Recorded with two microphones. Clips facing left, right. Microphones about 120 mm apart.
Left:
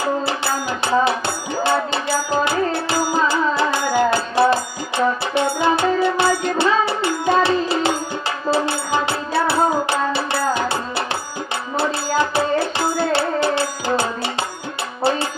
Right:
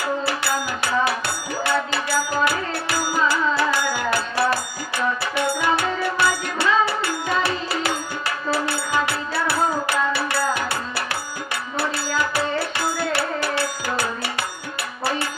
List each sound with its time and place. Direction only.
0.0 s music: 25° left (ahead or behind)
12.2 s music: 25° left (ahead or behind)